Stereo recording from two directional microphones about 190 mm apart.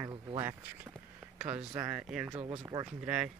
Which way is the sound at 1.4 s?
10° right (ahead or behind).